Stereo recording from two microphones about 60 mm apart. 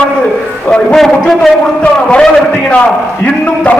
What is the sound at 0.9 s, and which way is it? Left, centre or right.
Speech, centre.